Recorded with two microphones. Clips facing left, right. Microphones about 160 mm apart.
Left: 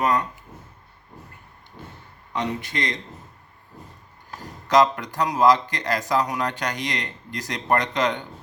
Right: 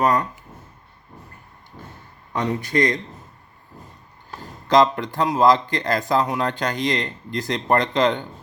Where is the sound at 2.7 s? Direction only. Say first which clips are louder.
Right 8 dB; 50° right (ahead or behind).